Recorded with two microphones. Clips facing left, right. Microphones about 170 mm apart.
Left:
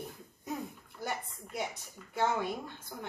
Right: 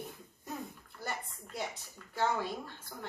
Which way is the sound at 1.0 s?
10° left (ahead or behind).